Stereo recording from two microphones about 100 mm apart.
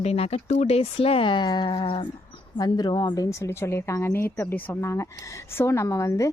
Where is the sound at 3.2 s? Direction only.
30° left (ahead or behind).